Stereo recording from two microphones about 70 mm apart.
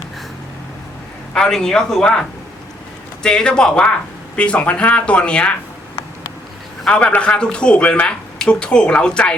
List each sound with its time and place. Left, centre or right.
1.3 s speech: centre
3.2 s speech: centre
6.8 s speech: centre